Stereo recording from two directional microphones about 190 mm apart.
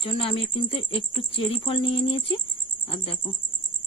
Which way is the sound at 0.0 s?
30° left (ahead or behind).